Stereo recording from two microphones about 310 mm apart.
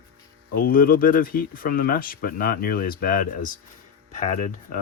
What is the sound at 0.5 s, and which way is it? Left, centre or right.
Speech, left.